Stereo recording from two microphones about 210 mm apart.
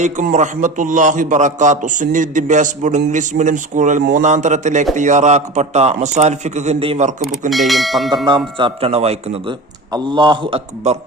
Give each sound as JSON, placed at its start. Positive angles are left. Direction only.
{"t": 0.0, "sound": "a man's voice", "side_deg": -35}
{"t": 7.5, "sound": "speech", "side_deg": 0}
{"t": 8.1, "sound": "speech", "side_deg": -20}